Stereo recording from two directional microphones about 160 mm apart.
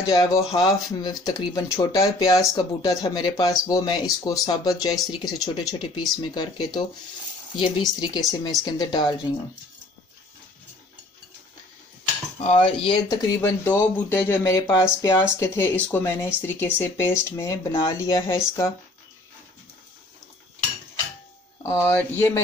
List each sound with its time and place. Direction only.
0.1 s speech: 25° left (ahead or behind)
4.9 s speech: centre (ahead or behind)
5.4 s speech: 25° left (ahead or behind)
12.8 s speech: 20° left (ahead or behind)
21.6 s speech: 15° left (ahead or behind)